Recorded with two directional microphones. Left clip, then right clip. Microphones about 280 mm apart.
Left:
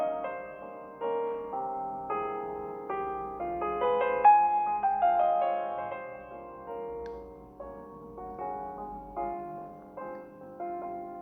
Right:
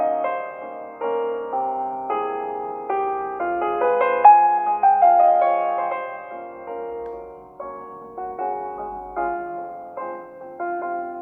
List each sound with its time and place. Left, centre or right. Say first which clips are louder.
0.0 s music: right 11 dB; right
9.1 s music: right 10 dB; right